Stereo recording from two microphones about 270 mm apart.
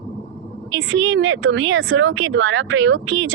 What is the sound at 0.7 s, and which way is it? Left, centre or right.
Speech, right.